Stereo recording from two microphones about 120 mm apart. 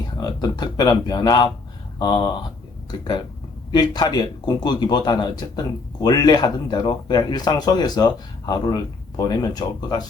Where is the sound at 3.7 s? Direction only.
35° left (ahead or behind).